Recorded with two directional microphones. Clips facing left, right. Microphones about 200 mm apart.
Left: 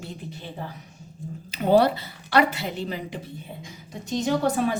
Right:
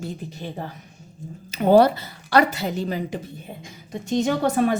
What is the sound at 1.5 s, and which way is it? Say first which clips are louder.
A woman's voice: right 4 dB; 45° right (ahead or behind).